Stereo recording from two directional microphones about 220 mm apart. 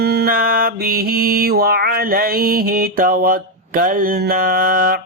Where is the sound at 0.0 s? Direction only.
45° right (ahead or behind).